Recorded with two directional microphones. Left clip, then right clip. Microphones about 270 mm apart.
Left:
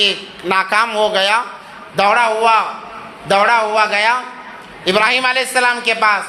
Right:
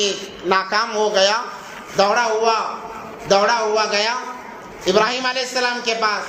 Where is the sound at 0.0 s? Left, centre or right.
Left.